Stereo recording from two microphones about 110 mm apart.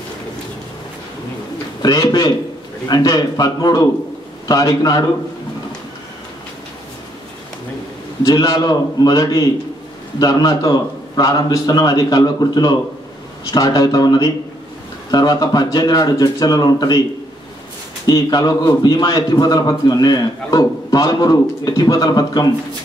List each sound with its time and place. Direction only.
1.8 s a man's voice: 35° left (ahead or behind)
8.2 s a man's voice: 30° left (ahead or behind)
18.0 s a man's voice: 35° left (ahead or behind)